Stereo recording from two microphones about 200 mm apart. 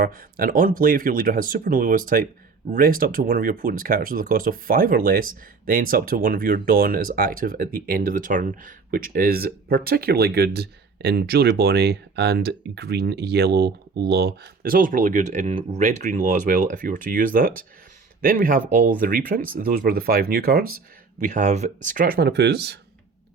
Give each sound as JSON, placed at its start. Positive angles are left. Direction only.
{"t": 0.0, "sound": "speech", "side_deg": -45}
{"t": 21.2, "sound": "speech", "side_deg": -35}